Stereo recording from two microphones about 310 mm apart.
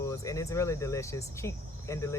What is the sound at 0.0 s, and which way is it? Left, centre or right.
Speech, centre.